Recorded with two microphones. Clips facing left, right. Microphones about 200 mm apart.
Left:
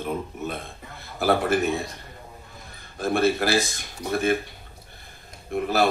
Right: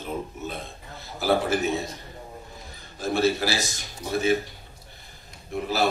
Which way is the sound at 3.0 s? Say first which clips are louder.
Left 1 dB; 55° left (ahead or behind).